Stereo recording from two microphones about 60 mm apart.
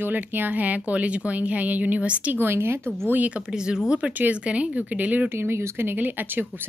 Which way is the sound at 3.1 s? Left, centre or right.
Right.